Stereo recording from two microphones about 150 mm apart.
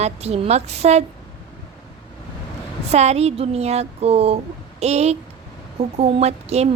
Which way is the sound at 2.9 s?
45° right (ahead or behind).